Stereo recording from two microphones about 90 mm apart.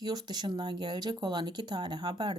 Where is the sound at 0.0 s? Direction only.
50° right (ahead or behind).